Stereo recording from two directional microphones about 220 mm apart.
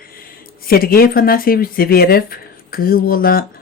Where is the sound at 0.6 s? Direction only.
40° left (ahead or behind).